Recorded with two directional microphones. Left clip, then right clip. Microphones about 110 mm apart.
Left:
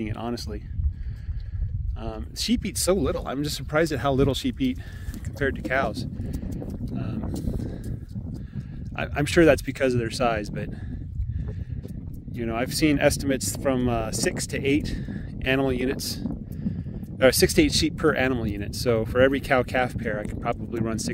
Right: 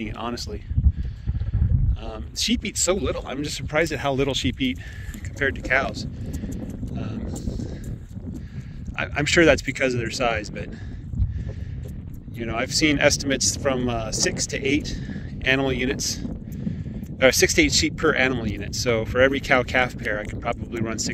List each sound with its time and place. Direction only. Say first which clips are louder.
0.0 s speech: right 2 dB; 25° left (ahead or behind)
2.0 s speech: right 3 dB; 35° left (ahead or behind)
2.6 s speech: even; 60° left (ahead or behind); by 4.7 s 85° left
5.4 s speech: right 3 dB; 45° left (ahead or behind)
6.3 s clip-clop: right 4 dB; 25° left (ahead or behind)
7.0 s a sound: even; 35° left (ahead or behind)
8.9 s speech: right 2 dB; 40° left (ahead or behind)
12.4 s speech: right 2 dB; 30° left (ahead or behind)
14.0 s speech: right 3 dB; 35° left (ahead or behind)